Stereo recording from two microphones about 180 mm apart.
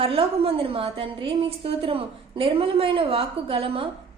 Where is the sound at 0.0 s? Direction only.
30° right (ahead or behind).